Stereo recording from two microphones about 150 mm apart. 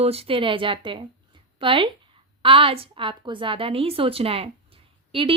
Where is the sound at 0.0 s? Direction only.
40° right (ahead or behind).